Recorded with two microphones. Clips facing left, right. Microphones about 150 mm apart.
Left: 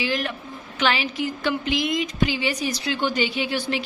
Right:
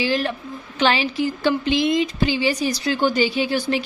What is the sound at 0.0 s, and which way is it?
Speech, 30° right (ahead or behind).